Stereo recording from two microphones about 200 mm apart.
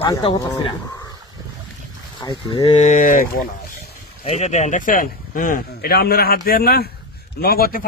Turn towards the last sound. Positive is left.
turn(degrees=50)  # may be behind; listen again after turning